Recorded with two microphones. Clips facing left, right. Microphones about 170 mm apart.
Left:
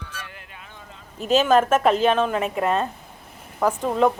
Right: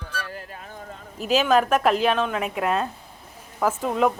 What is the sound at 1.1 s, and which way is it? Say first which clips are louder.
Speech: left 2 dB; centre (ahead or behind).